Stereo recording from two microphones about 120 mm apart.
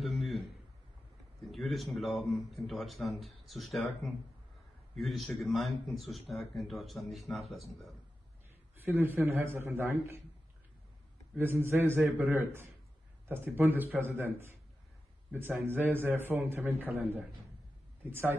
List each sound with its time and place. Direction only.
0.0 s a sound: centre (ahead or behind)
2.0 s speech: centre (ahead or behind)
8.7 s a man's voice: 15° right (ahead or behind)
11.3 s a man's voice: 20° right (ahead or behind)